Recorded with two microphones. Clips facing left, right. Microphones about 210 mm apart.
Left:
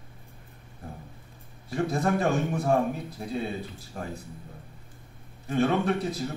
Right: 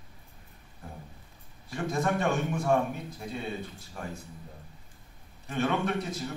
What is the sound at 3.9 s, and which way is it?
Speech, 40° left (ahead or behind).